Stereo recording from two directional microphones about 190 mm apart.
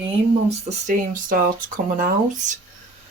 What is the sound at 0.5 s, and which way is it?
Speech, 40° right (ahead or behind).